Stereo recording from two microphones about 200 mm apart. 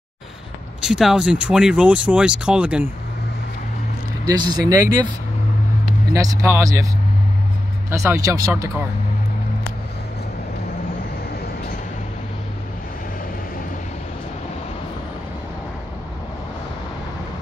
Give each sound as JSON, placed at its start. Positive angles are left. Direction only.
{"t": 0.7, "sound": "speech", "side_deg": -5}
{"t": 4.3, "sound": "speech", "side_deg": -20}
{"t": 6.1, "sound": "speech", "side_deg": -15}
{"t": 7.9, "sound": "speech", "side_deg": -15}